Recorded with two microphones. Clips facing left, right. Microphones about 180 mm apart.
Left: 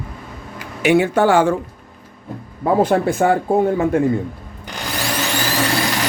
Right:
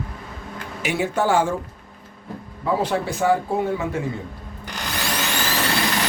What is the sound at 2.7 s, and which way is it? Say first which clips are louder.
A man's voice: left 7 dB; 55° left (ahead or behind).